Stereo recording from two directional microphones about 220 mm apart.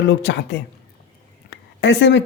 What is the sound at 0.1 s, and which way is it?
Speech, 50° left (ahead or behind).